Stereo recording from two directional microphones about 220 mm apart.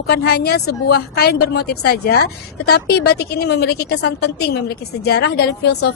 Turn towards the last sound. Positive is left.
turn(degrees=50)  # may be behind; listen again after turning